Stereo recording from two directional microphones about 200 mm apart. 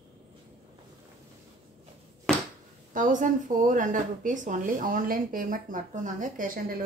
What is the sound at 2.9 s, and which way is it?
Speech, 40° right (ahead or behind).